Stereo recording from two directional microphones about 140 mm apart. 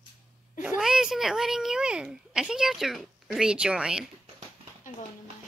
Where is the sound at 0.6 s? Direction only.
5° right (ahead or behind).